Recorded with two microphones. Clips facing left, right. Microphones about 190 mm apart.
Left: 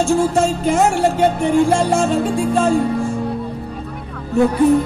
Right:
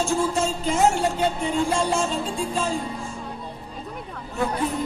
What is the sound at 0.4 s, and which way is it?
Music, 65° left (ahead or behind).